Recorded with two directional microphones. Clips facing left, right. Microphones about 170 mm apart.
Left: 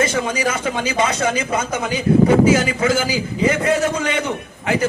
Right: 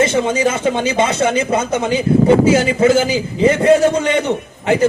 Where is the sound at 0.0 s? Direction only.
25° right (ahead or behind).